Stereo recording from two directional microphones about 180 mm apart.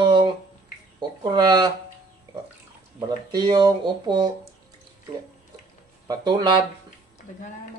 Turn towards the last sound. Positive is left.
turn(degrees=-25)  # may be behind; listen again after turning